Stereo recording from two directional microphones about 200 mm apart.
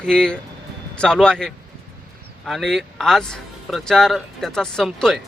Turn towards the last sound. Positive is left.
turn(degrees=0)  # may be behind; listen again after turning